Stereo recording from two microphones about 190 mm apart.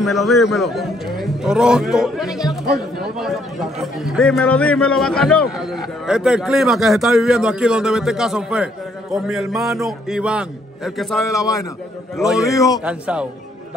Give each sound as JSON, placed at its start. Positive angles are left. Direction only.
{"t": 0.0, "sound": "a man's voice", "side_deg": 0}
{"t": 11.2, "sound": "a man's voice", "side_deg": 15}
{"t": 12.8, "sound": "speech", "side_deg": -5}